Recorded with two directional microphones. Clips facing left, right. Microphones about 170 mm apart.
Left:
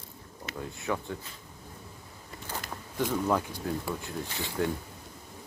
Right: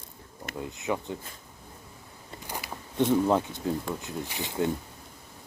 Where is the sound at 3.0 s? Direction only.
25° right (ahead or behind).